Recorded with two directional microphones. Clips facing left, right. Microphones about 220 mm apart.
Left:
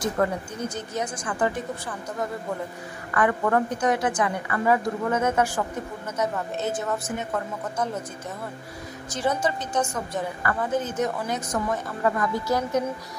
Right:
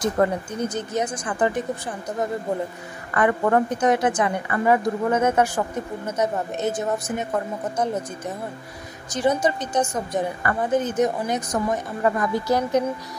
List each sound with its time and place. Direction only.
0.0 s a woman's voice: 20° right (ahead or behind)
3.2 s a woman's voice: 25° right (ahead or behind)
6.6 s a woman's voice: 15° right (ahead or behind)
9.1 s a woman's voice: 15° right (ahead or behind)